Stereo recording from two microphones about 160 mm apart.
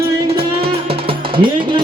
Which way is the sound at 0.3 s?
35° right (ahead or behind).